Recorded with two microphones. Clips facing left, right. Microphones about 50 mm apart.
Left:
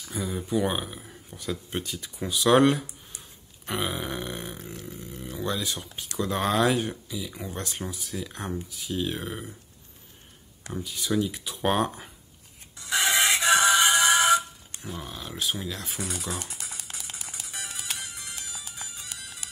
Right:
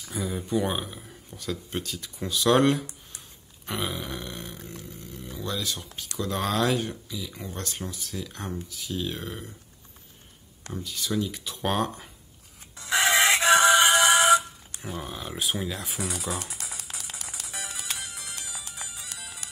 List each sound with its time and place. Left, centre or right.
0.0 s speech: centre
5.0 s a sound: centre
5.4 s speech: left
10.6 s speech: centre
12.7 s music: right
14.0 s music: centre
14.9 s speech: centre
15.8 s speech: centre
16.6 s a sound: centre
17.3 s music: centre